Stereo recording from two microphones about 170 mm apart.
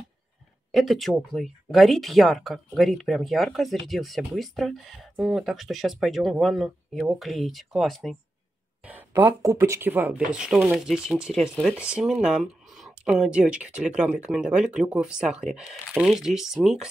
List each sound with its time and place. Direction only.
0.7 s speech: centre (ahead or behind)
8.8 s speech: 10° right (ahead or behind)